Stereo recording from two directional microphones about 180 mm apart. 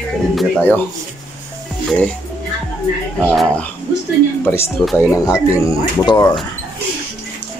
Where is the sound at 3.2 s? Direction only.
5° left (ahead or behind); by 6.3 s 25° left (ahead or behind).